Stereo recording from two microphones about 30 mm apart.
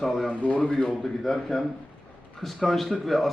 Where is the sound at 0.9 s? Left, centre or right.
Centre.